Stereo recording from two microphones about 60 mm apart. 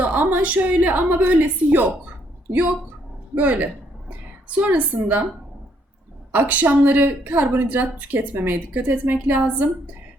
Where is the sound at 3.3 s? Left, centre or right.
Right.